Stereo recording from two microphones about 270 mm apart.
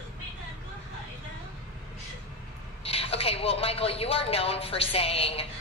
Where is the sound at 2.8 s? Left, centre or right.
Left.